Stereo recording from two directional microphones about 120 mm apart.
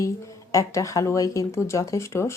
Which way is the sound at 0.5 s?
25° left (ahead or behind).